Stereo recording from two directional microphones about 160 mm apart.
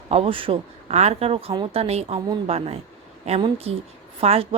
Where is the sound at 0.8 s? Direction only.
45° right (ahead or behind).